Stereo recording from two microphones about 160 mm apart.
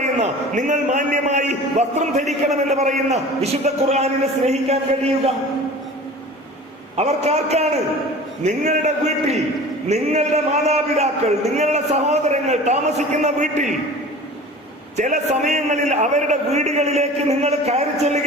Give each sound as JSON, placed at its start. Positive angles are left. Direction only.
{"t": 0.0, "sound": "a man's voice", "side_deg": -45}
{"t": 6.9, "sound": "a man's voice", "side_deg": -40}
{"t": 14.9, "sound": "a man's voice", "side_deg": -50}